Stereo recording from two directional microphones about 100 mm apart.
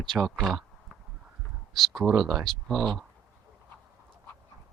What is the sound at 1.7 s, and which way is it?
Speech, centre (ahead or behind).